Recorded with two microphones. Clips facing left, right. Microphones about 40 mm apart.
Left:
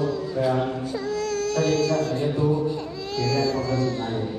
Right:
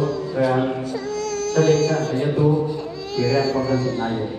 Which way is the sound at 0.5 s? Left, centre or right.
Right.